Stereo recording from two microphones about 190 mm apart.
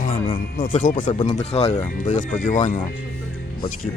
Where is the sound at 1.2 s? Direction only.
30° left (ahead or behind).